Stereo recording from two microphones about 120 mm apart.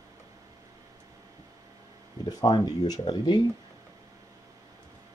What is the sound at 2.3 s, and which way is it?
Speech, 35° left (ahead or behind).